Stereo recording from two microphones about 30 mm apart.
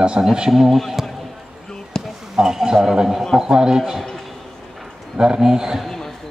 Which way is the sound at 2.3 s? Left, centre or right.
Right.